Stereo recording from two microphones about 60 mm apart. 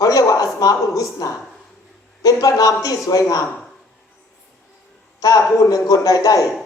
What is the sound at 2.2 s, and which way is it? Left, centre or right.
Speech, left.